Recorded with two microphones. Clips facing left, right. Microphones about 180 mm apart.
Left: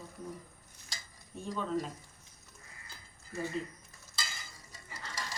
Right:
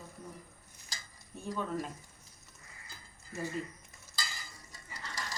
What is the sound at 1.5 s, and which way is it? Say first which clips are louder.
Speech: left 2 dB; 5° right (ahead or behind).